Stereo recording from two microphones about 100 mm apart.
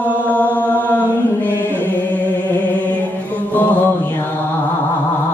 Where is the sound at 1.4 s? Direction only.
20° left (ahead or behind).